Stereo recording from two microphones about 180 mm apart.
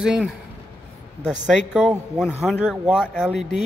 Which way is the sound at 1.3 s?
5° right (ahead or behind).